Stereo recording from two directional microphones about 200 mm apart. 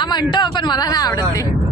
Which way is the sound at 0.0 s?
20° left (ahead or behind).